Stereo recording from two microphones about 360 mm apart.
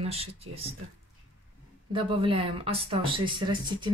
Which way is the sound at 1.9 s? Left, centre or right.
Centre.